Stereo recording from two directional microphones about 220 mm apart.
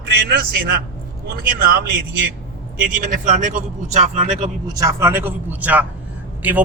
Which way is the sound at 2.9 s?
35° right (ahead or behind).